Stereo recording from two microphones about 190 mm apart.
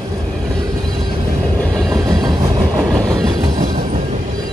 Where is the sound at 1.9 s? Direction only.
20° right (ahead or behind).